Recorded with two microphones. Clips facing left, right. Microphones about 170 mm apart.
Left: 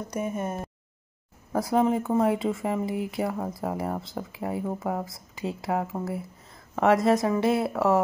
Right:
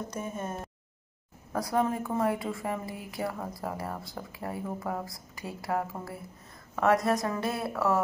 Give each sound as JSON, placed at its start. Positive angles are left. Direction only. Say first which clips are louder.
{"t": 0.1, "sound": "speech", "louder": "left 6 dB", "side_deg": 15}